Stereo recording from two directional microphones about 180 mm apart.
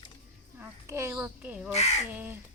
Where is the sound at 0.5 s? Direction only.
15° right (ahead or behind).